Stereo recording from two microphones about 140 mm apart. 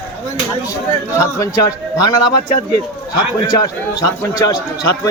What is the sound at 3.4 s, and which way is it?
A man's voice, 25° left (ahead or behind).